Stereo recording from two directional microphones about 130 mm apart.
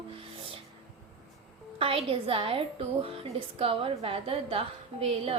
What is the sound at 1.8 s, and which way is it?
A woman's voice, 45° right (ahead or behind).